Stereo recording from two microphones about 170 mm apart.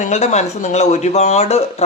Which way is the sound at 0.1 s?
40° left (ahead or behind).